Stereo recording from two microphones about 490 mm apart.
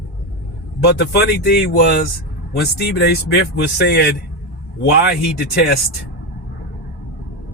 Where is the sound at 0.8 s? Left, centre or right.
Centre.